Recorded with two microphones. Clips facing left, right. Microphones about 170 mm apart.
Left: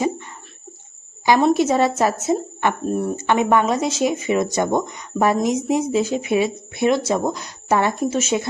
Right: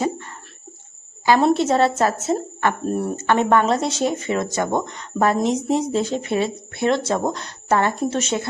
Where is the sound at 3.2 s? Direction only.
10° left (ahead or behind).